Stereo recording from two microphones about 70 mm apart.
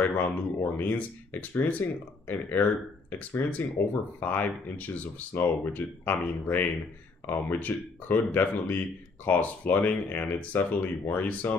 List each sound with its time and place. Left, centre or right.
0.0 s speech: left